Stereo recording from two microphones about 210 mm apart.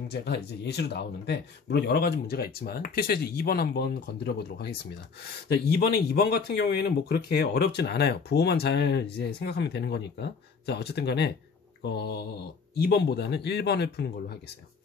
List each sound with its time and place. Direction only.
0.1 s speech: 50° left (ahead or behind)
5.8 s speech: 50° left (ahead or behind)